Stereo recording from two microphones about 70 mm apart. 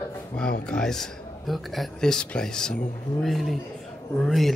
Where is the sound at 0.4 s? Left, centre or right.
Centre.